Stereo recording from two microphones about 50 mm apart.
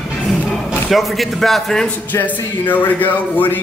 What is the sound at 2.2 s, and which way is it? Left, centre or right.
Speech, left.